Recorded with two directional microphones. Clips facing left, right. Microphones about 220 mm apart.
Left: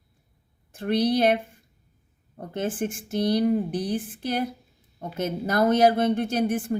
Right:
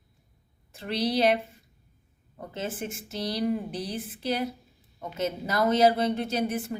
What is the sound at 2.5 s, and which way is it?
A woman's voice, 50° left (ahead or behind).